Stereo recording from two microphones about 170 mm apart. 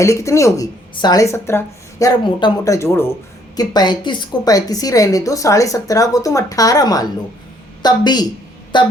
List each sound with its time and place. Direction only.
0.0 s speech: 15° left (ahead or behind)